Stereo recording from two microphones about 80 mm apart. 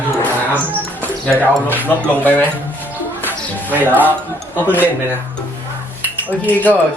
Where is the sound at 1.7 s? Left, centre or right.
Left.